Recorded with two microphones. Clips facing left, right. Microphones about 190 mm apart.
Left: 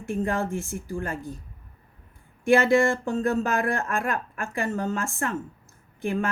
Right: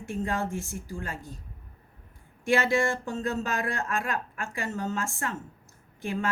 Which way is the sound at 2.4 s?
55° left (ahead or behind).